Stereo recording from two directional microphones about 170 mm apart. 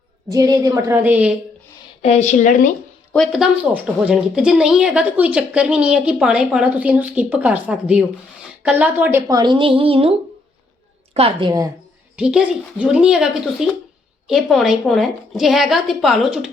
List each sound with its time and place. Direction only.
0.3 s speech: 20° right (ahead or behind)
2.0 s speech: 40° left (ahead or behind)
3.1 s a woman's voice: centre (ahead or behind); by 11.7 s 25° right (ahead or behind)
12.1 s a woman's voice: 5° right (ahead or behind)